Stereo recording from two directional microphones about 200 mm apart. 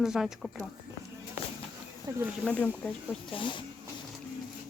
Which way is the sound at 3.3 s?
25° left (ahead or behind).